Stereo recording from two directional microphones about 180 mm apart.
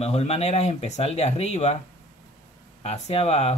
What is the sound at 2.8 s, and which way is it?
Speech, 35° left (ahead or behind).